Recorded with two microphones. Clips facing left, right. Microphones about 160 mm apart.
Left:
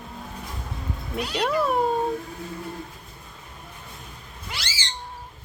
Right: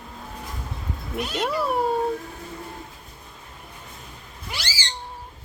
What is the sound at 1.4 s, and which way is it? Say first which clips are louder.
Speech: left 2 dB; 10° right (ahead or behind).